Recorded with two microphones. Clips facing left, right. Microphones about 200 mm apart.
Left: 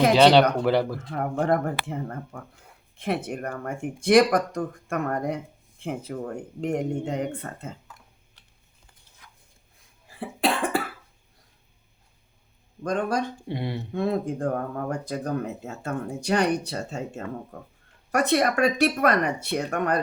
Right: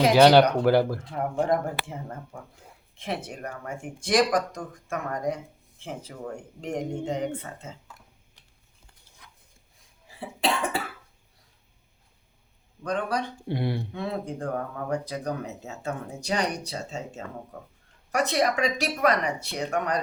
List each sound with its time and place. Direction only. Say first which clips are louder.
0.6 s speech: right 2 dB; centre (ahead or behind)
1.4 s speech: left 1 dB; 60° left (ahead or behind)
10.2 s cough: left 2 dB; 55° left (ahead or behind)
12.8 s speech: left 3 dB; 45° left (ahead or behind)
13.5 s speech: right 6 dB; 5° right (ahead or behind)
13.9 s speech: left 6 dB; 45° left (ahead or behind)